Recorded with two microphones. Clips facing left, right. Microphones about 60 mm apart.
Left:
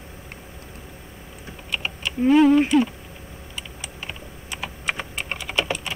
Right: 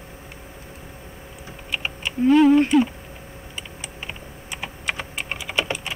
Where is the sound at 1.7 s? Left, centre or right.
Centre.